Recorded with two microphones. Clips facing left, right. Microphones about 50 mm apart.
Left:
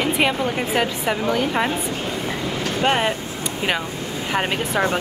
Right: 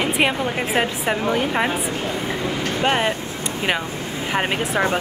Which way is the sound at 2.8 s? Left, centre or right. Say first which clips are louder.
Left 1 dB; centre.